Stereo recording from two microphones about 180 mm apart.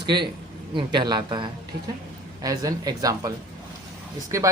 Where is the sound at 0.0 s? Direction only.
25° right (ahead or behind).